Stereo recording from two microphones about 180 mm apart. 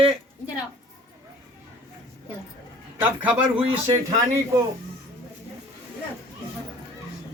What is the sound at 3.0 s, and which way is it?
Speech, 10° right (ahead or behind).